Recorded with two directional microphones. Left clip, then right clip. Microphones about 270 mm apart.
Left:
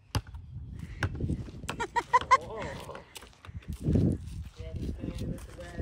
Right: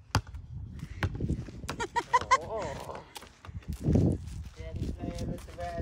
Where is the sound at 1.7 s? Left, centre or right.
Centre.